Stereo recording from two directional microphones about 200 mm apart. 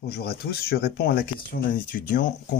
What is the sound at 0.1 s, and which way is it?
Speech, 55° left (ahead or behind).